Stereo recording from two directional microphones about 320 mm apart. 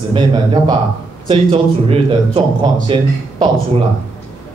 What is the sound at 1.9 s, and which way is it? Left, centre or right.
A man's voice, centre.